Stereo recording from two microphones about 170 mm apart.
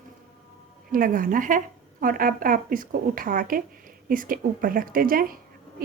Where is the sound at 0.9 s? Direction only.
55° right (ahead or behind).